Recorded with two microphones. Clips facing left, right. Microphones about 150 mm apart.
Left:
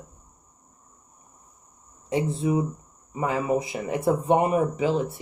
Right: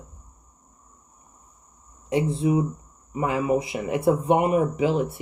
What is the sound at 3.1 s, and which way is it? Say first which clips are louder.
Speech: right 2 dB; 30° left (ahead or behind).